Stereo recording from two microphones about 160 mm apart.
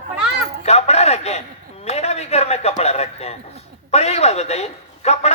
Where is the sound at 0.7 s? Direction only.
40° left (ahead or behind).